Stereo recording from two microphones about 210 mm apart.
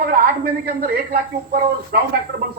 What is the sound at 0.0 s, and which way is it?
A man's voice, 45° right (ahead or behind).